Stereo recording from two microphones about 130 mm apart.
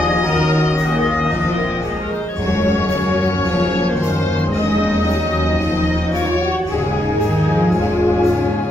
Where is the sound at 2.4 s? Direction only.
20° left (ahead or behind).